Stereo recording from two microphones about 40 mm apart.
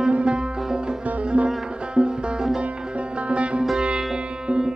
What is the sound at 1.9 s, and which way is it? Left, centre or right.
Music, centre.